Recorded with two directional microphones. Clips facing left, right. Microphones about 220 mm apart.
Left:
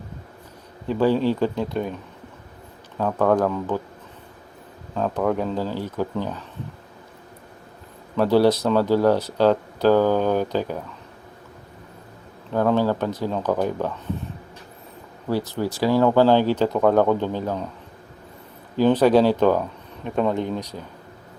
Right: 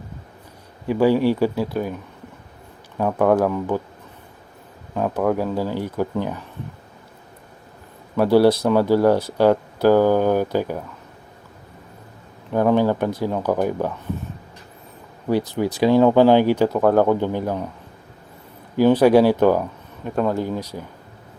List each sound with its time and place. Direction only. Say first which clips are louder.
0.9 s speech: right 3 dB; 10° right (ahead or behind)
3.0 s speech: right 2 dB; 10° right (ahead or behind)
4.9 s speech: right 2 dB; 10° right (ahead or behind)
8.1 s speech: right 2 dB; 10° right (ahead or behind)
12.5 s speech: right 2 dB; 15° right (ahead or behind)
15.3 s speech: right 3 dB; 15° right (ahead or behind)
16.6 s speech: right 1 dB; 5° right (ahead or behind)
18.8 s speech: right 2 dB; 10° right (ahead or behind)